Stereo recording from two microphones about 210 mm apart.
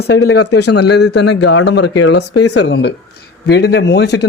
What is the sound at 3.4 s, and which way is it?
Speech, 50° left (ahead or behind).